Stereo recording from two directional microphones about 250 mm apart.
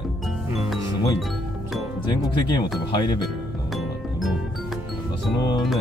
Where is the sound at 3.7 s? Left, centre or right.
Centre.